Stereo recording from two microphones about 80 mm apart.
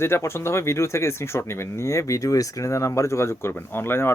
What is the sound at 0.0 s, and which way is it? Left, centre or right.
Speech, left.